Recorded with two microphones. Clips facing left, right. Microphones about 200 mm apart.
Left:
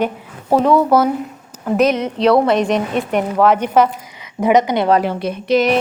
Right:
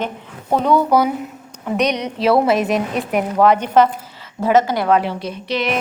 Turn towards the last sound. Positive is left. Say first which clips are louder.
# left 7 dB
turn(degrees=45)  # may be behind; listen again after turning